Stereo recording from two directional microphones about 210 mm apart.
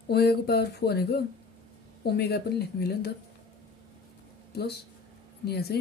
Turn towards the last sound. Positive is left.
turn(degrees=50)  # may be behind; listen again after turning